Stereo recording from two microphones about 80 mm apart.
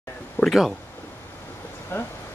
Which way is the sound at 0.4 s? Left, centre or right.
Centre.